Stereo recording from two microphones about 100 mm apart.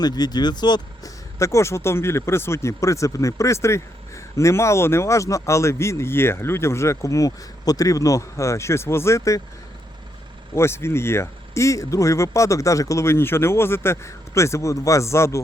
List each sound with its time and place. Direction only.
0.0 s speech: 40° left (ahead or behind)
1.4 s speech: 30° left (ahead or behind)
10.5 s speech: 25° left (ahead or behind)